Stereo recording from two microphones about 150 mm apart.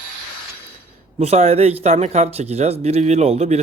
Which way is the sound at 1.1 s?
45° right (ahead or behind).